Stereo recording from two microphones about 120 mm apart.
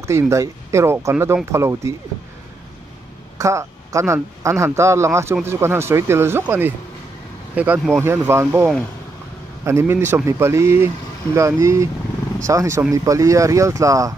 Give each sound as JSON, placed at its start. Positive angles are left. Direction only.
{"t": 0.0, "sound": "speech", "side_deg": -25}
{"t": 3.3, "sound": "speech", "side_deg": -25}
{"t": 9.7, "sound": "speech", "side_deg": -20}